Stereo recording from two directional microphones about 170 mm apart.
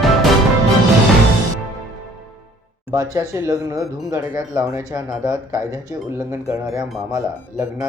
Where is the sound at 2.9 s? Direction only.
20° right (ahead or behind).